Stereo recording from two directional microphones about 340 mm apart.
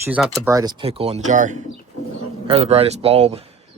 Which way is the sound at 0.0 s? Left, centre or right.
Centre.